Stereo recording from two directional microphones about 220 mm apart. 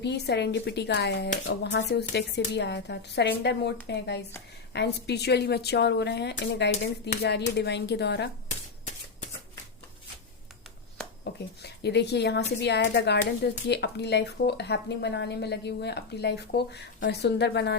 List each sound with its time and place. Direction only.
0.0 s speech: 50° left (ahead or behind)
8.4 s shuffling cards: 35° left (ahead or behind)
11.6 s speech: 50° left (ahead or behind)